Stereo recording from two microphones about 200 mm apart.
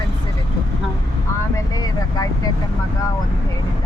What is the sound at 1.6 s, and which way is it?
Speech, 20° left (ahead or behind).